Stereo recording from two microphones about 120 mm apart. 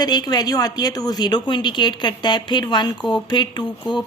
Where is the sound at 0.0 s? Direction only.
35° left (ahead or behind).